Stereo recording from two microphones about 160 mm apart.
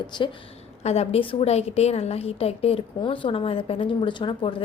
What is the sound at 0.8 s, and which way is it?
A woman's voice, 40° left (ahead or behind).